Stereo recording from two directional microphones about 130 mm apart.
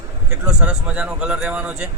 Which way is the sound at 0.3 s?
10° right (ahead or behind).